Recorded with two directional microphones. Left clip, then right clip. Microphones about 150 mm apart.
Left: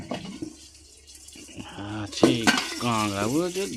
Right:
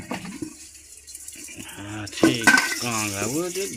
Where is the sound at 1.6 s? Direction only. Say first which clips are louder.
Left 1 dB; 20° left (ahead or behind).